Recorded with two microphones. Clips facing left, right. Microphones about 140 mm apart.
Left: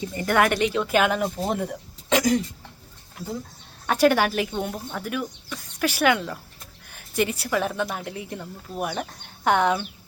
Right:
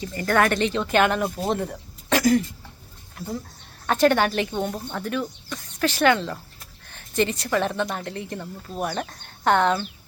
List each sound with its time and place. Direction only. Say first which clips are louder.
0.0 s a woman's voice: even; 20° left (ahead or behind); by 1.5 s centre (ahead or behind)
2.1 s a woman's voice: right 2 dB; 20° left (ahead or behind)
3.8 s a woman's voice: even; 10° left (ahead or behind)